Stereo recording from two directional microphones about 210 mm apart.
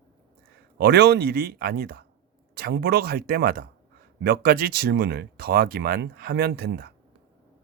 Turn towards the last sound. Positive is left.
turn(degrees=-50)  # may be behind; listen again after turning